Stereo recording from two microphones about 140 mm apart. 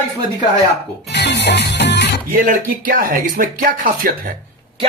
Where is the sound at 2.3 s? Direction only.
85° right.